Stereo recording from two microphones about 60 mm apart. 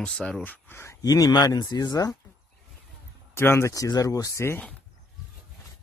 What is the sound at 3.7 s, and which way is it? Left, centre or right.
Speech, left.